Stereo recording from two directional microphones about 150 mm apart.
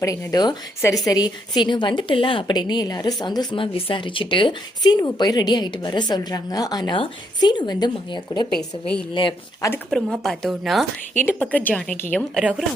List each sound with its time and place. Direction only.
0.0 s a woman's voice: 20° left (ahead or behind)
8.5 s speech: 5° left (ahead or behind)
9.1 s speech: 30° left (ahead or behind)
9.9 s speech: 5° left (ahead or behind)
11.2 s a woman's voice: 10° left (ahead or behind)
12.4 s speech: 5° right (ahead or behind)